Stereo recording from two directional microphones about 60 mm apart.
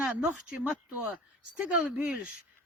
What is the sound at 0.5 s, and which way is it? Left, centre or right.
Speech, right.